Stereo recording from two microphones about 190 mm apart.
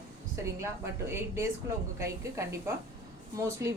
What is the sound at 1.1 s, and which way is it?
A woman's voice, 15° right (ahead or behind).